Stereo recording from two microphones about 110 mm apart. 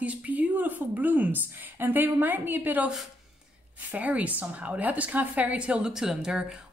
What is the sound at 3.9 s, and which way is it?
A woman's voice, 15° right (ahead or behind).